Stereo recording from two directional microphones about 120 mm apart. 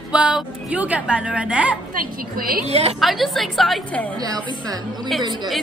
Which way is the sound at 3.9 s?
10° left (ahead or behind).